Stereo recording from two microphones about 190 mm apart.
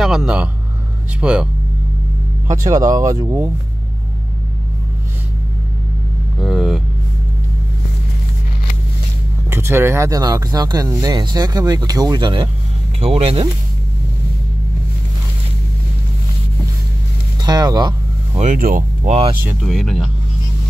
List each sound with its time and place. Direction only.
0.0 s a man's voice: centre (ahead or behind)
2.4 s speech: 15° right (ahead or behind)
6.4 s speech: centre (ahead or behind)
9.5 s speech: 15° right (ahead or behind); by 13.5 s 30° right (ahead or behind)
17.4 s vehicle: 20° right (ahead or behind)
18.4 s speech: 45° right (ahead or behind)
19.4 s speech: centre (ahead or behind)